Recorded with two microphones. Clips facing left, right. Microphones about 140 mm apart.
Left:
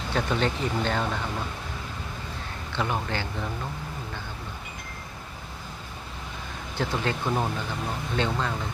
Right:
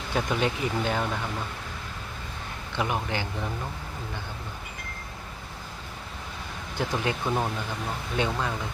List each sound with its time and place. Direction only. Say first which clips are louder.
0.1 s speech: even; 10° right (ahead or behind)
2.7 s speech: even; 15° right (ahead or behind)
6.7 s speech: even; 15° right (ahead or behind)
7.3 s speech: left 1 dB; centre (ahead or behind)
8.1 s speech: even; 10° right (ahead or behind)